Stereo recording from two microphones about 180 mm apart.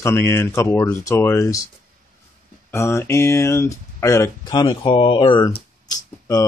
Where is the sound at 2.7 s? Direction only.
15° left (ahead or behind).